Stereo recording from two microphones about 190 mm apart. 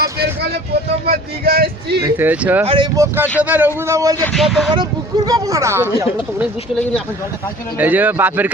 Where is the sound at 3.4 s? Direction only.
10° right (ahead or behind).